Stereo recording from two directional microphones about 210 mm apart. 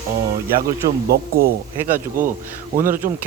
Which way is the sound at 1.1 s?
45° right (ahead or behind).